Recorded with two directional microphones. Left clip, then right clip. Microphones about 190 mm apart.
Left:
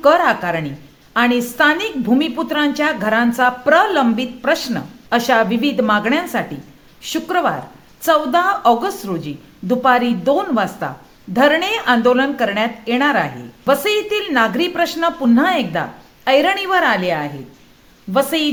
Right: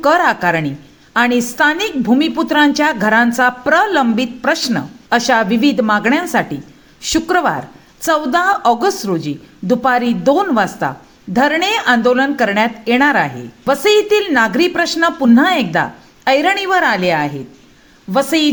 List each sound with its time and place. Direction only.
0.0 s speech: 20° right (ahead or behind)